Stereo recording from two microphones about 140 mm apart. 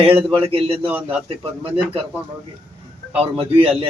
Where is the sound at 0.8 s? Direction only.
10° right (ahead or behind).